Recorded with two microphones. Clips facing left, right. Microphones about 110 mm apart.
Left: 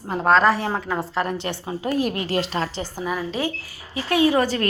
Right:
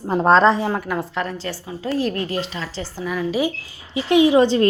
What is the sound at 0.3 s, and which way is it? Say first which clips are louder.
Speech: right 3 dB; 30° right (ahead or behind).